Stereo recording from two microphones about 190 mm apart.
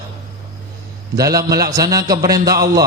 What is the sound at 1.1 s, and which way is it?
A man's voice, 20° right (ahead or behind).